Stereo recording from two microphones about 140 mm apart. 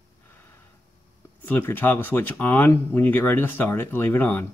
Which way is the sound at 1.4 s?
15° left (ahead or behind).